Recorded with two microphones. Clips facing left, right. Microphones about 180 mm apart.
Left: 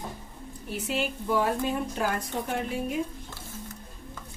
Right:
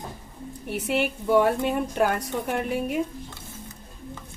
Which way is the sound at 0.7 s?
65° right (ahead or behind).